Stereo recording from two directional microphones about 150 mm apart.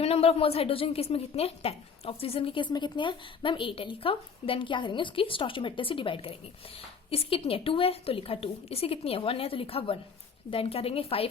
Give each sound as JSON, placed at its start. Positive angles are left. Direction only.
{"t": 0.0, "sound": "a woman's voice", "side_deg": 40}